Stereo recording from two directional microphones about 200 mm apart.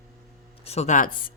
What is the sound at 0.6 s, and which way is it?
Speech, 30° left (ahead or behind).